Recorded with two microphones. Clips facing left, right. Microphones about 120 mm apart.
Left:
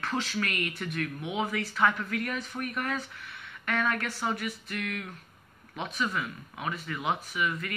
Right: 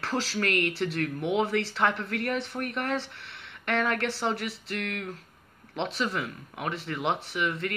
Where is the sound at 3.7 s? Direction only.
70° right (ahead or behind).